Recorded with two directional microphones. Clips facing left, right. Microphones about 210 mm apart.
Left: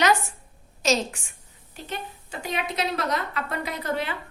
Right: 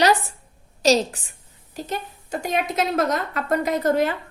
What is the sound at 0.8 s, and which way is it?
A woman's voice, 35° right (ahead or behind).